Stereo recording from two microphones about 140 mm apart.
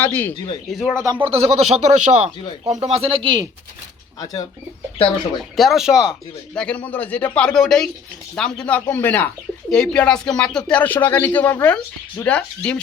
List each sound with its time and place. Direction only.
0.0 s speech: 15° left (ahead or behind)
0.7 s speech: 5° right (ahead or behind)
1.2 s speech: 45° right (ahead or behind)
4.2 s speech: 25° left (ahead or behind)
5.4 s speech: centre (ahead or behind)
6.5 s speech: 10° left (ahead or behind)